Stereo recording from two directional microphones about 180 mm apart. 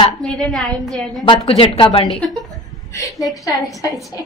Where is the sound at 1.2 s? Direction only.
30° left (ahead or behind).